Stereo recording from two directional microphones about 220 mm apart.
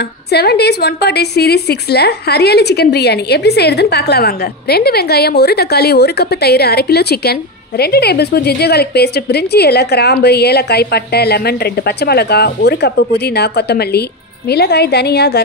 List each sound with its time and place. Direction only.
0.3 s a woman's voice: 45° left (ahead or behind)